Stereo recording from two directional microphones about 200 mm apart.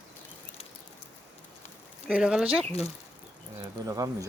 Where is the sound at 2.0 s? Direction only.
5° right (ahead or behind).